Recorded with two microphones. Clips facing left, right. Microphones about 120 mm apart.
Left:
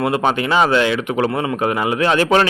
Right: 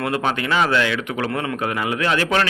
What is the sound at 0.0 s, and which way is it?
A man's voice, 20° left (ahead or behind).